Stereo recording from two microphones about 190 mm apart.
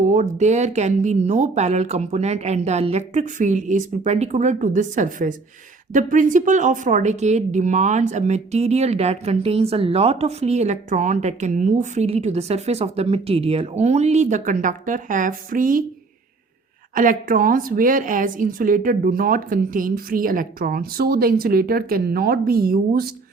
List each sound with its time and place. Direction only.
0.0 s speech: 40° right (ahead or behind)
16.9 s speech: 45° right (ahead or behind)